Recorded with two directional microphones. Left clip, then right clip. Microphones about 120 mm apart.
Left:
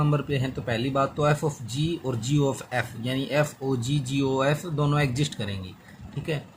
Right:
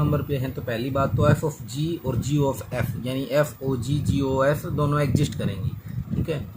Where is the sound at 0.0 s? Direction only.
40° left (ahead or behind).